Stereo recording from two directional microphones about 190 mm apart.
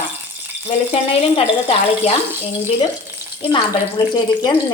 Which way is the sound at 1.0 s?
30° left (ahead or behind).